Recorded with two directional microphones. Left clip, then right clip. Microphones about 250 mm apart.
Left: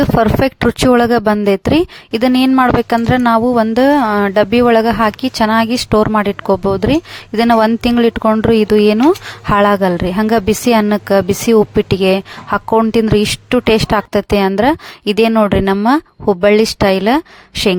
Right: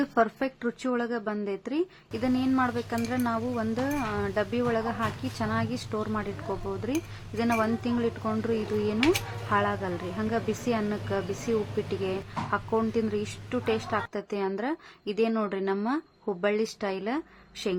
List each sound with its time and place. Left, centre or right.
0.0 s speech: left